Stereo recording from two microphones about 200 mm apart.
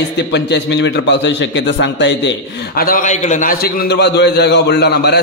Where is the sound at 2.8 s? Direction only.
40° left (ahead or behind).